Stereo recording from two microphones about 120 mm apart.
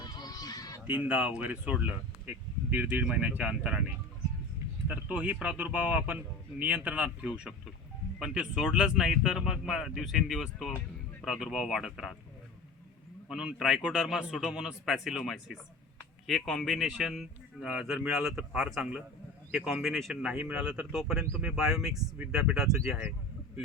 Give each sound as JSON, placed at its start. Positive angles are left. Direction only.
{"t": 0.0, "sound": "a sound", "side_deg": 35}
{"t": 0.9, "sound": "a man's voice", "side_deg": -10}
{"t": 13.2, "sound": "a man's voice", "side_deg": -5}